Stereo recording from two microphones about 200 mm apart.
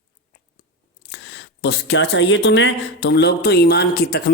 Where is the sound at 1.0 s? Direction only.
55° left (ahead or behind).